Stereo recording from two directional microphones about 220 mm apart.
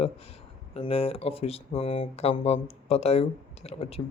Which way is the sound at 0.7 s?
25° left (ahead or behind).